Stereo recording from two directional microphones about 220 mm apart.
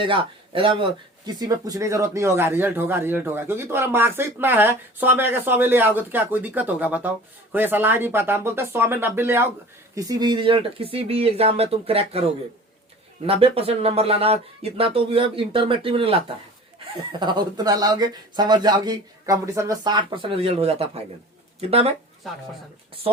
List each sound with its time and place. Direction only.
0.0 s speech: 25° right (ahead or behind)
13.2 s speech: 25° right (ahead or behind)